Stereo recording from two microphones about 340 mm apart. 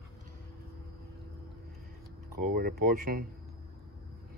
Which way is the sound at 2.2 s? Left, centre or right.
Right.